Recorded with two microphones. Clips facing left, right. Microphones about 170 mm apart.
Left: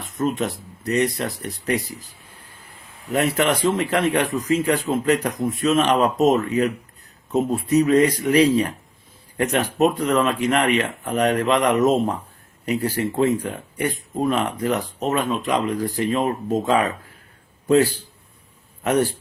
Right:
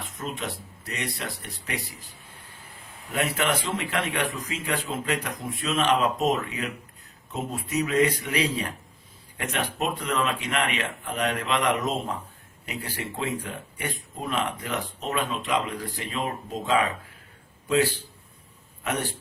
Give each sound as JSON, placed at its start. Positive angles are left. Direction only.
{"t": 0.2, "sound": "speech", "side_deg": 45}
{"t": 3.1, "sound": "a man's voice", "side_deg": 45}
{"t": 18.8, "sound": "a man's voice", "side_deg": 40}